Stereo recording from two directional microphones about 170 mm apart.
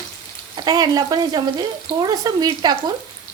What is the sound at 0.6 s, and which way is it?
Speech, 25° right (ahead or behind).